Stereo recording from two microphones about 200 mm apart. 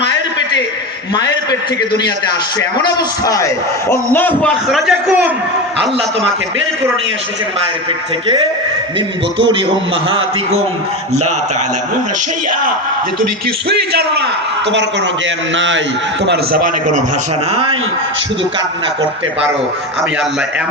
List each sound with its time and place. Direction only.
2.6 s a man's voice: 15° left (ahead or behind); by 5.3 s centre (ahead or behind)
10.1 s a man's voice: 25° right (ahead or behind)
15.5 s a man's voice: 65° right (ahead or behind)
16.2 s a man's voice: 55° right (ahead or behind)
17.5 s a man's voice: 25° right (ahead or behind)